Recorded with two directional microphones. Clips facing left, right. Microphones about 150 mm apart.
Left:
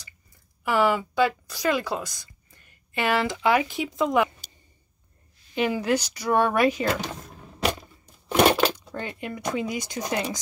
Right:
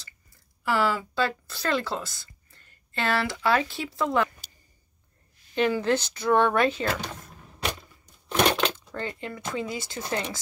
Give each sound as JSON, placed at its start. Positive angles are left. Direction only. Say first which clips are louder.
{"t": 0.0, "sound": "speech", "louder": "left 1 dB", "side_deg": 15}
{"t": 5.5, "sound": "speech", "louder": "even", "side_deg": 15}
{"t": 8.3, "sound": "speech", "louder": "left 4 dB", "side_deg": 15}